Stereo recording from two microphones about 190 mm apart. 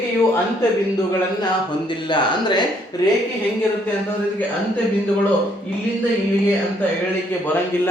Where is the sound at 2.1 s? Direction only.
25° left (ahead or behind).